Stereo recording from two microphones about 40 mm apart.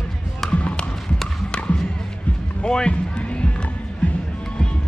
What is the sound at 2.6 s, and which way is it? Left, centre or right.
Music, left.